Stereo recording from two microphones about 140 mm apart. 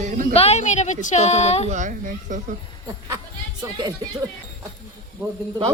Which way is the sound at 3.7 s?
30° right (ahead or behind).